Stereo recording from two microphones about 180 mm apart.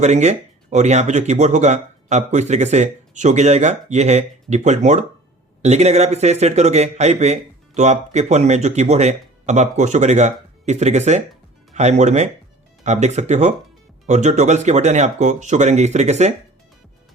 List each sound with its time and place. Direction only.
0.0 s speech: 40° right (ahead or behind)